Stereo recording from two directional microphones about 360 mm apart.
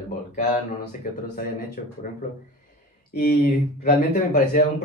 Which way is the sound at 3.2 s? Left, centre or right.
Left.